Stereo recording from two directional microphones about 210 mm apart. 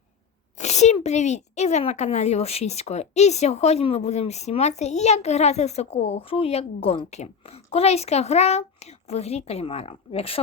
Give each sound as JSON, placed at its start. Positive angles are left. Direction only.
{"t": 0.5, "sound": "speech", "side_deg": 35}